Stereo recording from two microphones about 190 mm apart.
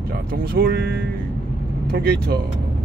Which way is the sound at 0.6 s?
60° right (ahead or behind).